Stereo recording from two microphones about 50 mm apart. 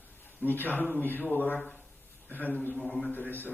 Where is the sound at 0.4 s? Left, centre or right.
Left.